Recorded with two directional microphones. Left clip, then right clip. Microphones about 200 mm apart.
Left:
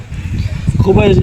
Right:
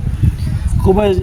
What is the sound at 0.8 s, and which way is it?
Speech, 15° right (ahead or behind).